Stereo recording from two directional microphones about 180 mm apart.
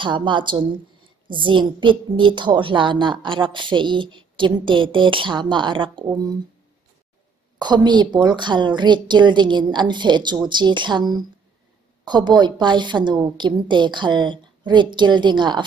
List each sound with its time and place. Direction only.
0.0 s a woman's voice: 25° right (ahead or behind)
7.5 s a woman's voice: 25° right (ahead or behind)